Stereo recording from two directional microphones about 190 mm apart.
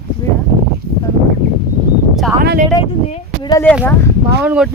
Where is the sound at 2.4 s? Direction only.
50° right (ahead or behind).